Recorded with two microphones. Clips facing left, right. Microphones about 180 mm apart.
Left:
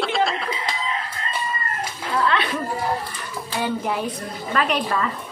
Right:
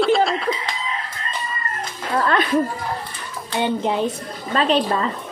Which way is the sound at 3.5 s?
25° right (ahead or behind).